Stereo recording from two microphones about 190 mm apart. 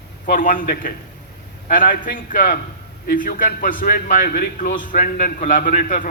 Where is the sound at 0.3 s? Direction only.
45° left (ahead or behind).